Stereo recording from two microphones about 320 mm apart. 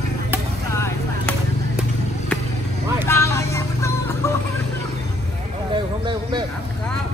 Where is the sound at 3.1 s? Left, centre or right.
Centre.